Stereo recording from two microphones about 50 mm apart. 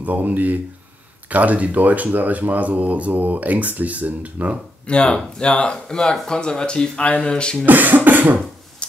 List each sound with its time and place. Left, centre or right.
0.0 s speech: right
4.8 s speech: left
7.6 s speech: right